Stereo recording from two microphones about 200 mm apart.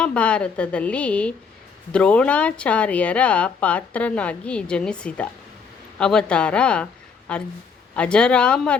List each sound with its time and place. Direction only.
0.0 s a woman's voice: 5° left (ahead or behind)